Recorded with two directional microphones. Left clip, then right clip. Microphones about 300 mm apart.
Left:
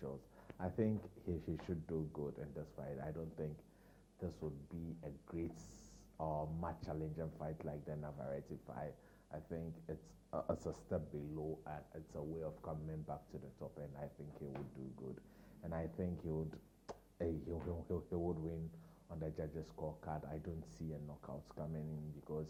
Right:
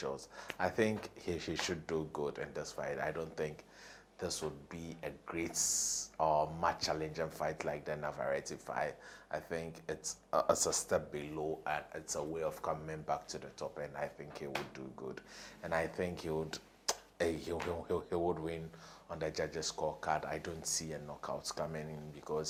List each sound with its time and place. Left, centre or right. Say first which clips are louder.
0.4 s speech: right 8 dB; centre
16.5 s a sound: right 14 dB; centre
18.2 s speech: right 7 dB; right
19.0 s speech: right 9 dB; centre
19.7 s speech: right 10 dB; right
20.0 s speech: right 11 dB; centre